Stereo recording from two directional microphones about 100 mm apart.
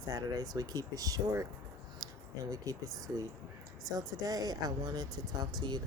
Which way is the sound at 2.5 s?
35° right (ahead or behind).